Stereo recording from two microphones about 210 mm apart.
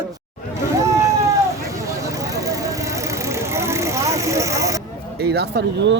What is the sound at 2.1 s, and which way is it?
Vehicle, 15° right (ahead or behind).